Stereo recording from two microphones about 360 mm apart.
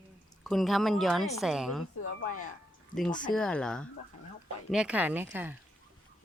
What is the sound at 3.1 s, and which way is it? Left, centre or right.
Speech, left.